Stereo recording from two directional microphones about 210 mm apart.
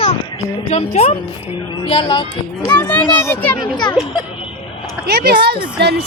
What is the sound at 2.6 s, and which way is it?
Speech, 10° left (ahead or behind).